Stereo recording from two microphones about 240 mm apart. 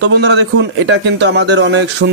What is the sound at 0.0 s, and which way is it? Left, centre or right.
A man's voice, right.